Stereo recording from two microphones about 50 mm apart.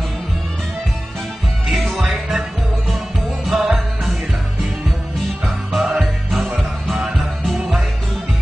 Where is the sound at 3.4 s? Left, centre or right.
Centre.